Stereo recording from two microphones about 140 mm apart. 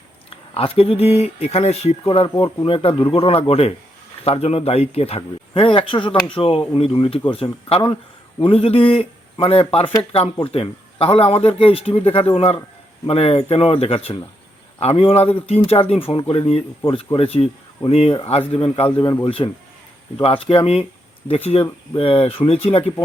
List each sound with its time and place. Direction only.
0.3 s speech: 45° left (ahead or behind)